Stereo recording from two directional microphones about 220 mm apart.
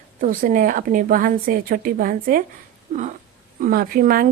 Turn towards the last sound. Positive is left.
turn(degrees=-40)  # may be behind; listen again after turning